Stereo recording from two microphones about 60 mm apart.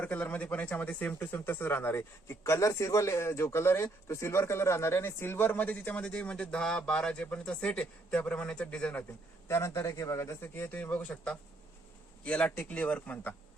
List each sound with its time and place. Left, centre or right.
0.0 s speech: left
1.2 s speech: left
2.4 s speech: left
9.5 s speech: left